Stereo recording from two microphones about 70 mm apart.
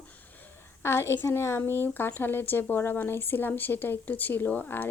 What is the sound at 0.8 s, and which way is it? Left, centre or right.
A woman's voice, left.